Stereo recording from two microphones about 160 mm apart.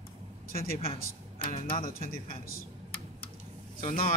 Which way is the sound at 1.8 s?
65° left (ahead or behind).